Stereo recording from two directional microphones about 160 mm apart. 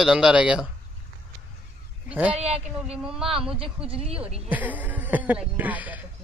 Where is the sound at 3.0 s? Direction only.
5° right (ahead or behind).